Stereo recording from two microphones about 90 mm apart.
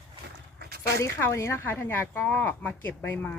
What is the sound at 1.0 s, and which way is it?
Speech, 30° left (ahead or behind).